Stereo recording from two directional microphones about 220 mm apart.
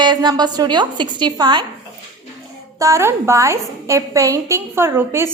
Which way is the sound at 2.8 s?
15° right (ahead or behind).